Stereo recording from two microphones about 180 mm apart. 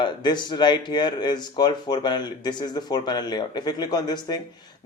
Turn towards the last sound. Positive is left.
turn(degrees=25)  # may be behind; listen again after turning